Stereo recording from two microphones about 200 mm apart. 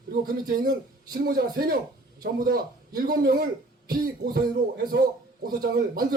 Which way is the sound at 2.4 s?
50° right (ahead or behind).